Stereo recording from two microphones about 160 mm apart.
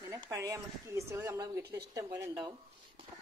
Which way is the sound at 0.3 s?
15° right (ahead or behind).